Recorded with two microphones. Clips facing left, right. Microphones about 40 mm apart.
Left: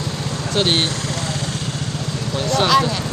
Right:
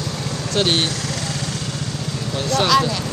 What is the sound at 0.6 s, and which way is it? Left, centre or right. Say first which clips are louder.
Speech: left 1 dB; left.